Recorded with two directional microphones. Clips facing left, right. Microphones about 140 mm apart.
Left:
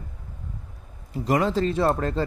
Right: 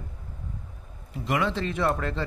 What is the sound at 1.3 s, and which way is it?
Speech, 40° left (ahead or behind).